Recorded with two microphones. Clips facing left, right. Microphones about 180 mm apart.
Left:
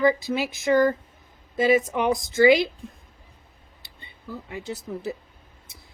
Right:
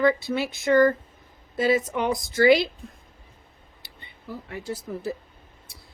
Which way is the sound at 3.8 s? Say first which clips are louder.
Even; 25° left (ahead or behind).